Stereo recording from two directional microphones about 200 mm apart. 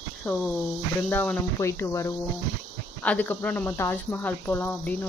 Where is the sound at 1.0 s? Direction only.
5° left (ahead or behind).